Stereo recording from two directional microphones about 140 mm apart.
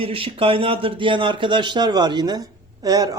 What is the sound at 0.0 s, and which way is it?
Speech, 40° right (ahead or behind).